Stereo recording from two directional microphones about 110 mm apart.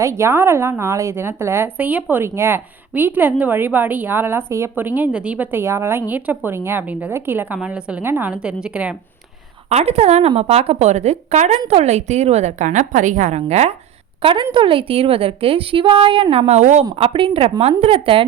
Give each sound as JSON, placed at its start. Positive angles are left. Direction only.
{"t": 0.0, "sound": "a woman's voice", "side_deg": -25}
{"t": 9.6, "sound": "a woman's voice", "side_deg": -75}
{"t": 14.2, "sound": "a woman's voice", "side_deg": -55}
{"t": 17.0, "sound": "a woman's voice", "side_deg": -55}